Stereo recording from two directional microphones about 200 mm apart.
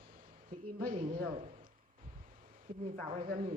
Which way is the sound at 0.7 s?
45° right (ahead or behind).